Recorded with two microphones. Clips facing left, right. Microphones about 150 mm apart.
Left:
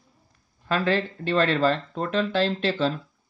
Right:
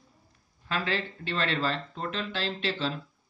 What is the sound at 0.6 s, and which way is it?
Speech, 45° left (ahead or behind).